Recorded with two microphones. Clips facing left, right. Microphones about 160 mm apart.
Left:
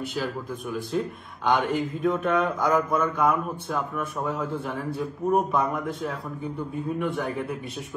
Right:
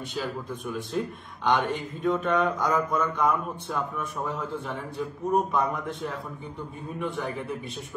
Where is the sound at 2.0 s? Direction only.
5° left (ahead or behind).